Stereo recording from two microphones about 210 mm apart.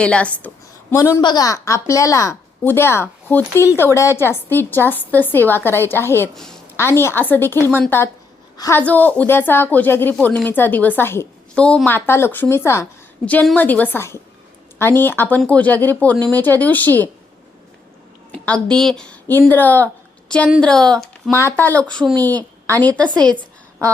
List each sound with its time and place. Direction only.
0.0 s a woman's voice: 5° left (ahead or behind)
18.3 s a woman's voice: 5° left (ahead or behind)
23.0 s speech: 20° right (ahead or behind)